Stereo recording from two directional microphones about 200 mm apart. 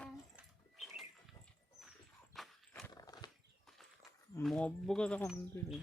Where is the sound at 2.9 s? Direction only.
20° left (ahead or behind).